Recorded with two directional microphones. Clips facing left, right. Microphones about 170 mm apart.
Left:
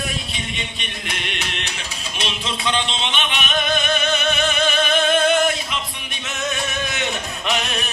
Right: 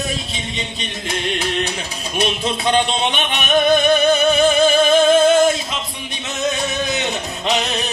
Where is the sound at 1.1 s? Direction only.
40° right (ahead or behind).